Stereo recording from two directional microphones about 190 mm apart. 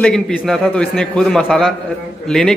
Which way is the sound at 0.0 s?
5° left (ahead or behind).